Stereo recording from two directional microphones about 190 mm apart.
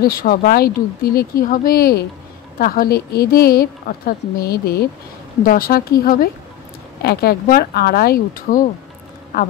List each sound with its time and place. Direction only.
0.0 s a woman's voice: 50° left (ahead or behind)